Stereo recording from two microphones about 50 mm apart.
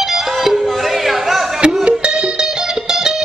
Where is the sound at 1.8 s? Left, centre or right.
Centre.